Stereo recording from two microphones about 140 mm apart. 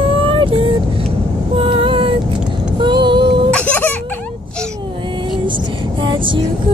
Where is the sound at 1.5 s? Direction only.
40° right (ahead or behind).